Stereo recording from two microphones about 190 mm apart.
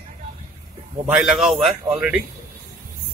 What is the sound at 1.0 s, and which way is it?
A man's voice, 5° right (ahead or behind).